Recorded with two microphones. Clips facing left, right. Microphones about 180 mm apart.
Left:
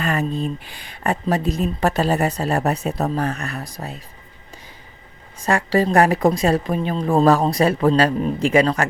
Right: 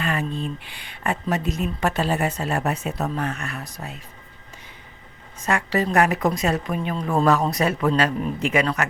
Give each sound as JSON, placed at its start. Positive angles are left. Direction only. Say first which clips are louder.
{"t": 0.0, "sound": "speech", "louder": "left 4 dB", "side_deg": 40}
{"t": 5.4, "sound": "speech", "louder": "left 4 dB", "side_deg": 35}